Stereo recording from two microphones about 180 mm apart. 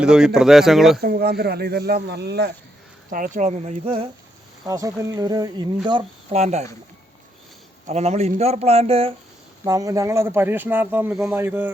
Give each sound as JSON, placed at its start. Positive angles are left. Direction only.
{"t": 0.0, "sound": "speech", "side_deg": -5}
{"t": 1.0, "sound": "speech", "side_deg": -60}
{"t": 3.1, "sound": "speech", "side_deg": -45}
{"t": 4.6, "sound": "speech", "side_deg": -20}
{"t": 7.9, "sound": "speech", "side_deg": -35}
{"t": 9.6, "sound": "speech", "side_deg": -20}